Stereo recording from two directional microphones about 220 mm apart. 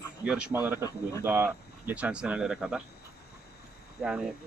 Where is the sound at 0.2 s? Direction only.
5° right (ahead or behind).